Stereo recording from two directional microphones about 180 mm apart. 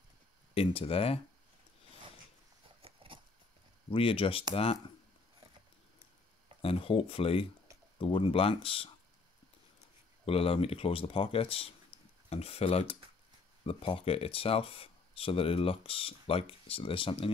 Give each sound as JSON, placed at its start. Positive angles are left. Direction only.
{"t": 0.6, "sound": "speech", "side_deg": 30}
{"t": 2.8, "sound": "a sound", "side_deg": -30}
{"t": 3.9, "sound": "speech", "side_deg": 30}
{"t": 6.6, "sound": "speech", "side_deg": 30}
{"t": 10.2, "sound": "speech", "side_deg": 30}
{"t": 11.9, "sound": "a sound", "side_deg": 30}
{"t": 12.3, "sound": "speech", "side_deg": 35}